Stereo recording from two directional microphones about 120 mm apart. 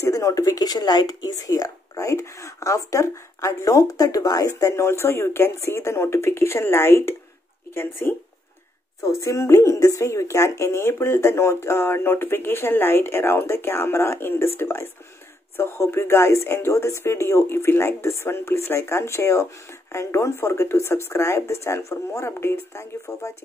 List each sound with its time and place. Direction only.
0.0 s speech: 25° left (ahead or behind)